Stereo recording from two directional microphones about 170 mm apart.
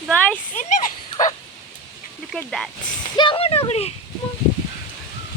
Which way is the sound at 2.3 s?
5° left (ahead or behind).